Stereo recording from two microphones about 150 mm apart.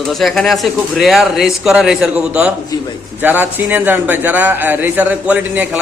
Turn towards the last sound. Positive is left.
turn(degrees=-10)  # may be behind; listen again after turning